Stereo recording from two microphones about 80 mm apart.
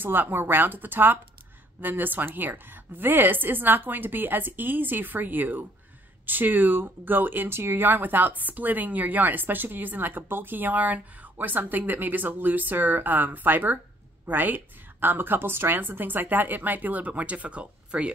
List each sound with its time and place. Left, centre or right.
0.0 s speech: right